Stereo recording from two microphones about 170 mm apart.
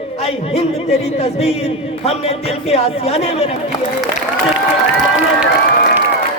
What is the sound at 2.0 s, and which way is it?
A man's voice, 35° left (ahead or behind).